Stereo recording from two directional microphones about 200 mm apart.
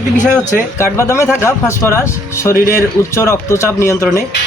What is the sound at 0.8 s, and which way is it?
Speech, 15° left (ahead or behind).